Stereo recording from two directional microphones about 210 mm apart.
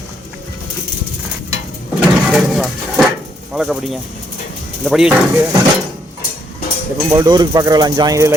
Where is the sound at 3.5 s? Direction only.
5° right (ahead or behind).